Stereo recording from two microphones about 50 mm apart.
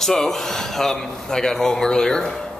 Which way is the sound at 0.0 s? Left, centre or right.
Centre.